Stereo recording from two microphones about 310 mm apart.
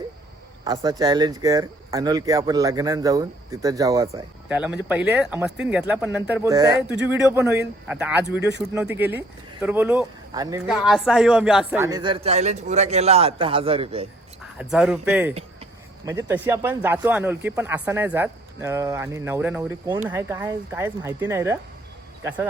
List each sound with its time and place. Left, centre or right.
0.6 s speech: centre
8.4 s speech: right
9.0 s speech: centre
10.8 s speech: centre
14.6 s speech: centre